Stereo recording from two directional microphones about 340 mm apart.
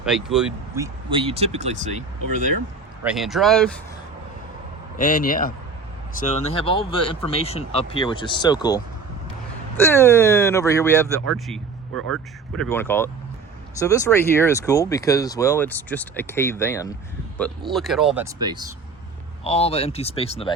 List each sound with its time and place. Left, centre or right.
0.0 s speech: centre
1.1 s speech: centre
3.0 s speech: centre
4.9 s a man's voice: left; by 11.6 s centre
11.9 s speech: right
12.5 s speech: centre
19.5 s speech: centre